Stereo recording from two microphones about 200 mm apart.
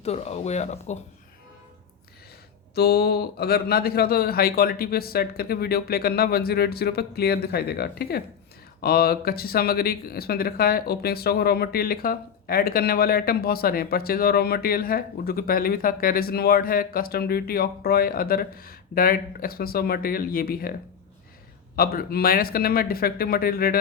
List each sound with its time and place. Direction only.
0.0 s speech: 30° left (ahead or behind)
2.7 s speech: 55° left (ahead or behind)
21.8 s speech: 50° left (ahead or behind)